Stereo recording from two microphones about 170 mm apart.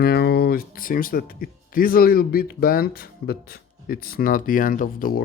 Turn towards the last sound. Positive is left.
turn(degrees=55)  # may be behind; listen again after turning